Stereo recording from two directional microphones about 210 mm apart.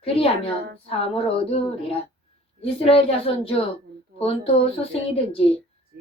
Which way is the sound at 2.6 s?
25° left (ahead or behind).